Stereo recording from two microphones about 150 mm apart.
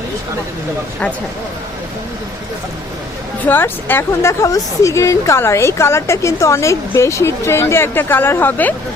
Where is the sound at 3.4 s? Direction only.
15° left (ahead or behind).